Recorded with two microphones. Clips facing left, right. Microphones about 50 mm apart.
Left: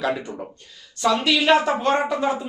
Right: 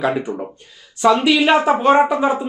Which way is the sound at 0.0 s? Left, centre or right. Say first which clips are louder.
Right 5 dB; centre.